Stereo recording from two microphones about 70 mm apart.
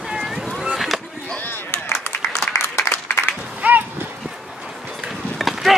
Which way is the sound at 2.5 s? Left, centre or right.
Left.